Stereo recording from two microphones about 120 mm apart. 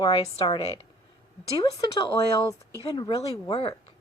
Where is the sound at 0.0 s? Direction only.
35° left (ahead or behind).